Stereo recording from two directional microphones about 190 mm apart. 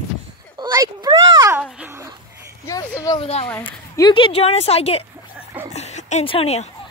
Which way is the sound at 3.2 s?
30° left (ahead or behind).